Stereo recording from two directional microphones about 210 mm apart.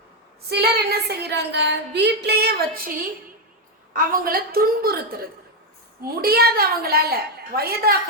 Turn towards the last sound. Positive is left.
turn(degrees=-45)  # may be behind; listen again after turning